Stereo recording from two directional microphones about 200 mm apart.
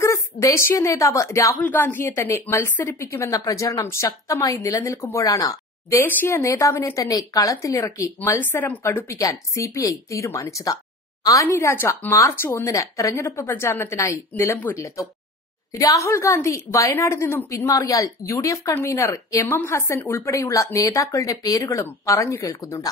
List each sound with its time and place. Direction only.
0.0 s a woman's voice: 15° left (ahead or behind)